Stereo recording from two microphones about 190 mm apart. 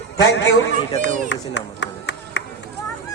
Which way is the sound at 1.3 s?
70° left (ahead or behind).